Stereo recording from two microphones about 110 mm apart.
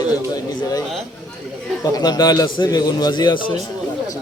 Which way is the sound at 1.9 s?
35° left (ahead or behind).